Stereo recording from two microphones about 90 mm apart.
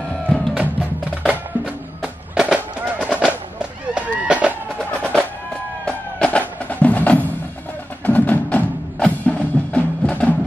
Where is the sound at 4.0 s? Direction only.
15° right (ahead or behind).